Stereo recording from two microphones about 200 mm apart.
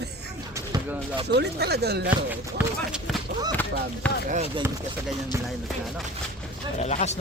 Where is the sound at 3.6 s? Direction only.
10° left (ahead or behind).